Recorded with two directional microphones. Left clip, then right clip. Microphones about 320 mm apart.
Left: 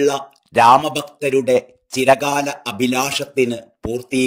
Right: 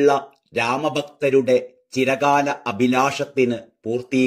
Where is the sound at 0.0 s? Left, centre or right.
Left.